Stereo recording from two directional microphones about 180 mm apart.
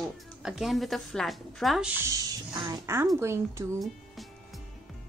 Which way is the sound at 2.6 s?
15° right (ahead or behind).